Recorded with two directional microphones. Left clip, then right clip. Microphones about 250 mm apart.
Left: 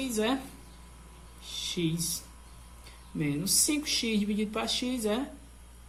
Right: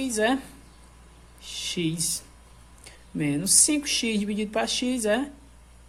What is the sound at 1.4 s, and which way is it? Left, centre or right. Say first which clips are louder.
Speech: right 3 dB; right.